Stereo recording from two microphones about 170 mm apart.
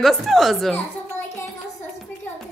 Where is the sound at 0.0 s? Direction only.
Centre (ahead or behind).